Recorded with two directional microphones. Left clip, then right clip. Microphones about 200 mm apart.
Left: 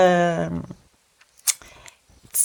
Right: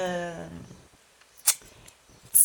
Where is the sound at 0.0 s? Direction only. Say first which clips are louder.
Left 14 dB; 45° left (ahead or behind).